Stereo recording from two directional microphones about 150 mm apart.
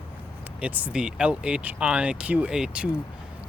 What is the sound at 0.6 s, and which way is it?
Speech, 10° right (ahead or behind).